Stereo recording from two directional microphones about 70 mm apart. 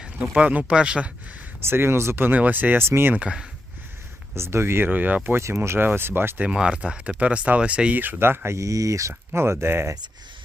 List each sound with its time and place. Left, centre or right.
0.0 s speech: centre
1.6 s speech: right
3.2 s speech: centre
4.4 s speech: right
4.9 s speech: right
5.4 s speech: right
6.4 s speech: centre; by 8.5 s right
8.5 s speech: right